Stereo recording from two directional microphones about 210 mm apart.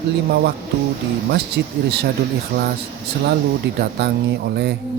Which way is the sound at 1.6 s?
55° right (ahead or behind).